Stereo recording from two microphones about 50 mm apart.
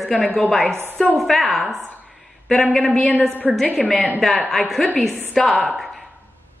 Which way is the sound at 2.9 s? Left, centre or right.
Centre.